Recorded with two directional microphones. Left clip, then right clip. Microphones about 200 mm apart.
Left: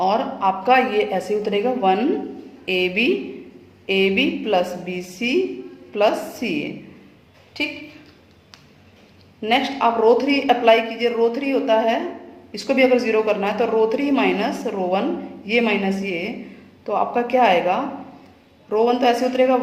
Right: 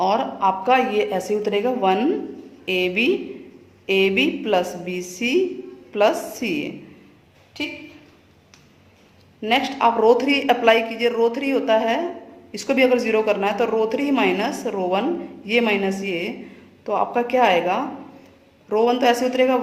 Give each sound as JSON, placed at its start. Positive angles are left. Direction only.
{"t": 0.0, "sound": "speech", "side_deg": -20}
{"t": 7.6, "sound": "a woman's voice", "side_deg": 0}
{"t": 9.4, "sound": "speech", "side_deg": -15}